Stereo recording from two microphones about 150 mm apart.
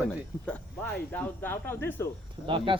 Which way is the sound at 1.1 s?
15° left (ahead or behind).